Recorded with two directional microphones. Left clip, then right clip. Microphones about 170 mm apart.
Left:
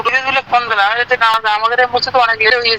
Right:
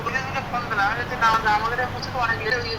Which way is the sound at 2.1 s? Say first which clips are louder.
Left 11 dB; 50° left (ahead or behind).